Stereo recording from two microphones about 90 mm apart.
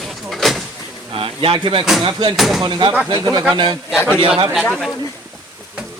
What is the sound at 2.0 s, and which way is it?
Speech, 60° right (ahead or behind).